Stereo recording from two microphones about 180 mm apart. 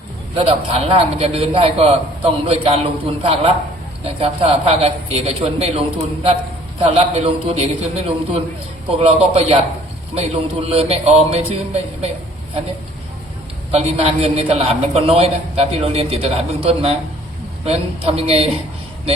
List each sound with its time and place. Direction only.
0.3 s a woman's voice: 30° right (ahead or behind)
13.7 s a woman's voice: 35° right (ahead or behind)